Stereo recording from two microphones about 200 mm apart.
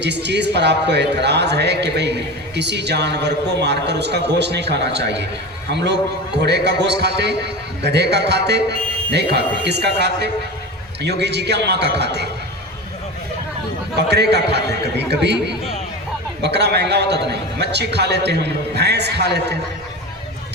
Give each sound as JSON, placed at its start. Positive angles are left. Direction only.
{"t": 0.0, "sound": "a man's voice", "side_deg": -60}
{"t": 14.1, "sound": "a man's voice", "side_deg": -55}